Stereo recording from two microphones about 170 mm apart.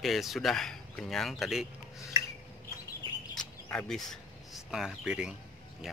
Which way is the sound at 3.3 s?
5° left (ahead or behind).